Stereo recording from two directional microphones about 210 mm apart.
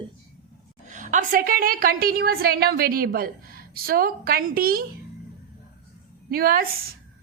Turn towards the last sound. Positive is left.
turn(degrees=-45)  # may be behind; listen again after turning